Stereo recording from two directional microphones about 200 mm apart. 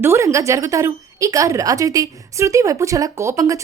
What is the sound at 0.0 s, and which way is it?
A woman's voice, 15° right (ahead or behind).